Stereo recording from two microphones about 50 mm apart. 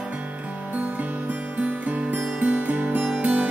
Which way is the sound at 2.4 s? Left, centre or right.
Right.